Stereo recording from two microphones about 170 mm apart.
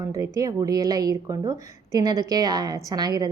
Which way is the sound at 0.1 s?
20° right (ahead or behind).